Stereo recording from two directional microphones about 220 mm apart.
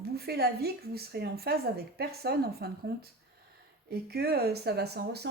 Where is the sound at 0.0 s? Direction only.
45° right (ahead or behind).